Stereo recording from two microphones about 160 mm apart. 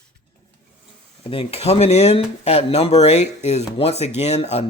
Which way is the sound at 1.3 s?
35° left (ahead or behind).